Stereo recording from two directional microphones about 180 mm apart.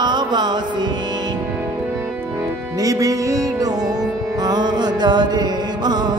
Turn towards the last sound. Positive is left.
turn(degrees=-25)  # may be behind; listen again after turning